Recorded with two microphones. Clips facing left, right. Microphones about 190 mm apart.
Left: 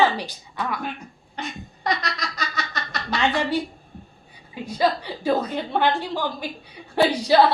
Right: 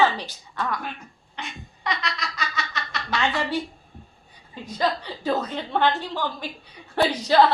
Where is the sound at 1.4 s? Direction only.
40° left (ahead or behind).